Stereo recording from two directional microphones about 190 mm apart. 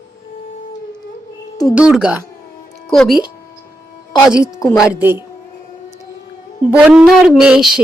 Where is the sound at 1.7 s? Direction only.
5° right (ahead or behind).